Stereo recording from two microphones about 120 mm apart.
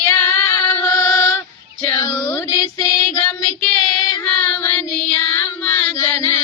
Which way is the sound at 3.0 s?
15° left (ahead or behind).